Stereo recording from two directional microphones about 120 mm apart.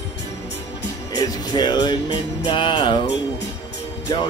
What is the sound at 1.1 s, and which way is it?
Music, 35° left (ahead or behind).